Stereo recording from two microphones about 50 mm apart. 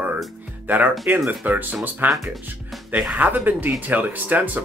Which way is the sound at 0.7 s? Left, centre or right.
Right.